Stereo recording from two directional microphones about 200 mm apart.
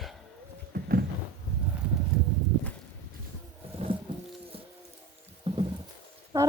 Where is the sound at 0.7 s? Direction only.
50° right (ahead or behind).